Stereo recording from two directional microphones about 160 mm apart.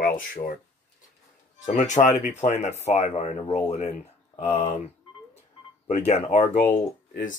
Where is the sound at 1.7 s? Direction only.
50° left (ahead or behind).